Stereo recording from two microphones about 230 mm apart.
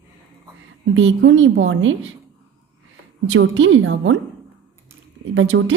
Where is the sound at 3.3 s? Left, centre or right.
Right.